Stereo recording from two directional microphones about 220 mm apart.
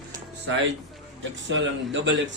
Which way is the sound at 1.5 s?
55° right (ahead or behind).